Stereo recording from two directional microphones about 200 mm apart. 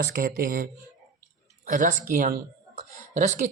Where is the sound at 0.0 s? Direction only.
50° right (ahead or behind).